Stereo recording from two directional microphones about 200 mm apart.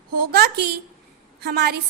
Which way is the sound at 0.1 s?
50° right (ahead or behind).